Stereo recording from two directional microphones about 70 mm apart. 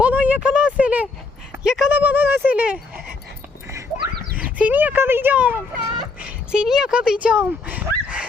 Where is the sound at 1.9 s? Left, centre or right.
Right.